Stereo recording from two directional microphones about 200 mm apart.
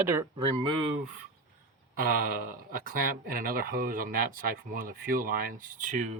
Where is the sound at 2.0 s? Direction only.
45° right (ahead or behind).